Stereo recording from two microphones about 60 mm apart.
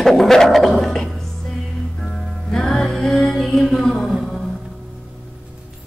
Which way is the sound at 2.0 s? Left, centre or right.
Centre.